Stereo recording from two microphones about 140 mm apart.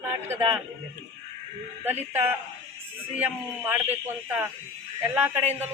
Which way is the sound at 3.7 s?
15° right (ahead or behind).